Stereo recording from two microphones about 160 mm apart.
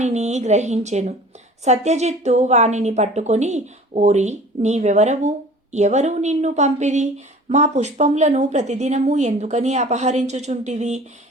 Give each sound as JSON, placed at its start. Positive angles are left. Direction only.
{"t": 0.0, "sound": "a woman's voice", "side_deg": -45}